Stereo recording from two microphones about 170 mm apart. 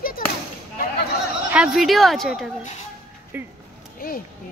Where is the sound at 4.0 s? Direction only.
60° left (ahead or behind).